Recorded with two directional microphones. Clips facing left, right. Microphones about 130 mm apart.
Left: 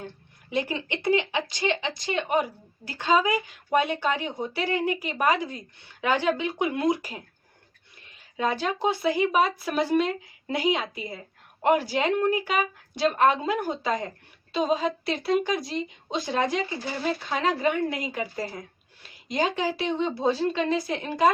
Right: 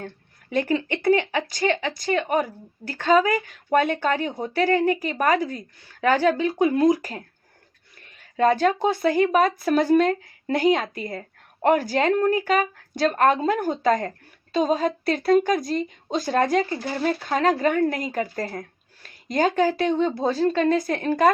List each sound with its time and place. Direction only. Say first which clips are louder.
0.5 s speech: right 5 dB; 50° right (ahead or behind)